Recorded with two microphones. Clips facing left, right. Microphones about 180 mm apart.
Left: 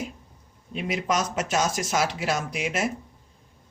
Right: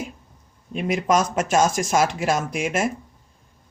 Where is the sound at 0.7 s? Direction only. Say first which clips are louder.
Right 6 dB; 50° right (ahead or behind).